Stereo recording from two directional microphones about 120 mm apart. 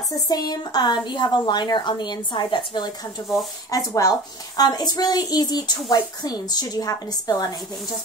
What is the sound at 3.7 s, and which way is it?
A woman's voice, 30° left (ahead or behind).